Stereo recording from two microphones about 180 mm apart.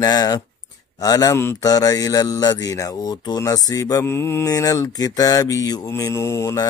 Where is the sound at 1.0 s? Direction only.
20° left (ahead or behind).